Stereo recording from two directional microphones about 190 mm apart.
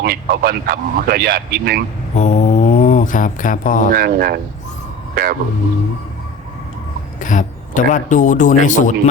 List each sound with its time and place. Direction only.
0.0 s speech: 50° right (ahead or behind)
2.1 s mantra: 40° left (ahead or behind)
3.9 s speech: 50° right (ahead or behind)
7.2 s speech: 40° left (ahead or behind)